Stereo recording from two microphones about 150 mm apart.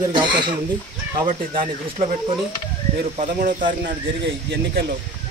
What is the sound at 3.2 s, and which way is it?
Speech, 65° right (ahead or behind).